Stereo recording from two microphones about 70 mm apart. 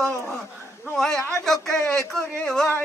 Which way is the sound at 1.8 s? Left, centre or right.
Centre.